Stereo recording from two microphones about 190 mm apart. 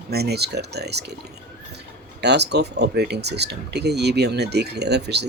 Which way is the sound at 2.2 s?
60° right (ahead or behind).